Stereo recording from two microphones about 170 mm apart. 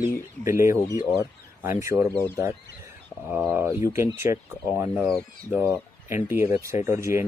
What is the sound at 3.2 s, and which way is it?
Speech, 10° right (ahead or behind).